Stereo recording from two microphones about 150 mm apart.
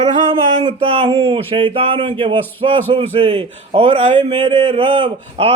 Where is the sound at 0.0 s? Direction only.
35° right (ahead or behind).